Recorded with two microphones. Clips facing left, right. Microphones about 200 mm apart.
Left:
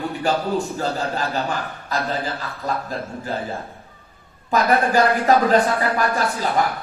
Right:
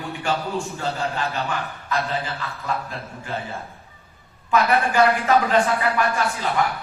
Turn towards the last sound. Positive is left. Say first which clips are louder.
# left 2 dB
turn(degrees=35)  # may be behind; listen again after turning